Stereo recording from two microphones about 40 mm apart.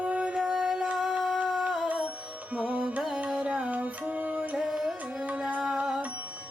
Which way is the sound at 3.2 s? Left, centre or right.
Right.